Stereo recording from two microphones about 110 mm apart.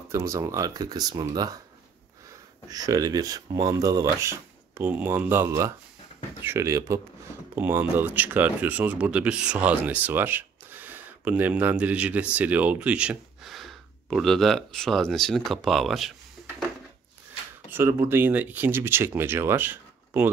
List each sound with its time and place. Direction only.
0.1 s speech: 30° right (ahead or behind)
2.7 s speech: 35° right (ahead or behind); by 13.5 s 10° right (ahead or behind)
13.5 s speech: centre (ahead or behind)
17.6 s speech: 20° right (ahead or behind)